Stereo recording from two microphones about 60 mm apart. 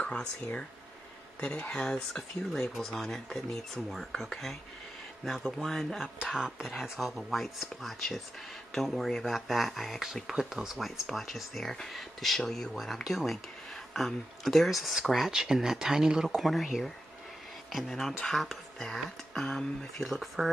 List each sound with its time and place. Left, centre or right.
1.4 s speech: left
1.8 s speech: centre
16.3 s speech: centre
20.0 s speech: centre